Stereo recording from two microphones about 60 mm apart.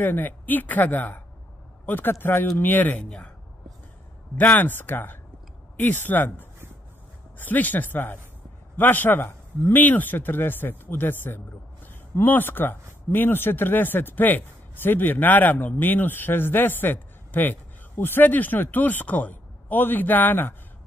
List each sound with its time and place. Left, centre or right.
0.0 s speech: left
3.0 s speech: centre
4.4 s speech: left